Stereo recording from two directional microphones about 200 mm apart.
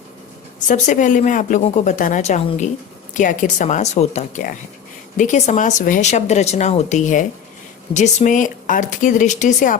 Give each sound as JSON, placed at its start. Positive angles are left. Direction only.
{"t": 0.7, "sound": "speech", "side_deg": 40}